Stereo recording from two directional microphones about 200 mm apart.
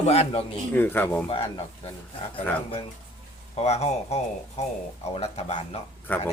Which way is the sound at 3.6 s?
30° left (ahead or behind).